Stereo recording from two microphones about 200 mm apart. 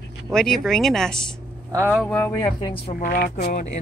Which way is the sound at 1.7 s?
10° right (ahead or behind).